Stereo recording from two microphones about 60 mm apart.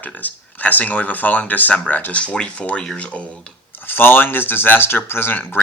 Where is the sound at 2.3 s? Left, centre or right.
Centre.